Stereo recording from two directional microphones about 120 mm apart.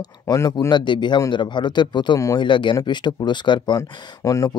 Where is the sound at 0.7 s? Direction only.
40° left (ahead or behind).